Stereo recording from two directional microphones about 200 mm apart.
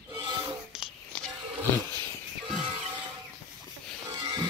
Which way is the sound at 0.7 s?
Centre (ahead or behind).